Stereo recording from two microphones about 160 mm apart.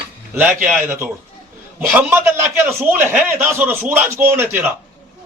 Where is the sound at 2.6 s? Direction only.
10° right (ahead or behind).